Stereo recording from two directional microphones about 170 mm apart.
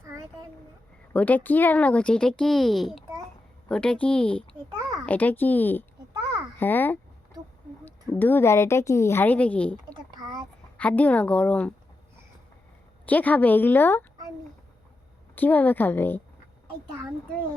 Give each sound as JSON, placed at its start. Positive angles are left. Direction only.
{"t": 1.1, "sound": "a woman's voice", "side_deg": 10}
{"t": 9.9, "sound": "a sound", "side_deg": -25}
{"t": 10.8, "sound": "a woman's voice", "side_deg": 10}
{"t": 13.1, "sound": "a woman's voice", "side_deg": 10}
{"t": 15.4, "sound": "a woman's voice", "side_deg": 10}